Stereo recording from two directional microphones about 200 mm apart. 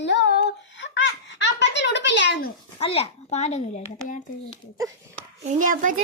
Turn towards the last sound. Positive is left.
turn(degrees=-40)  # may be behind; listen again after turning